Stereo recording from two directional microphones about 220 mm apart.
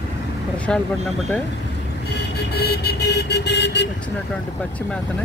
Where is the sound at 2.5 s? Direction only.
45° left (ahead or behind).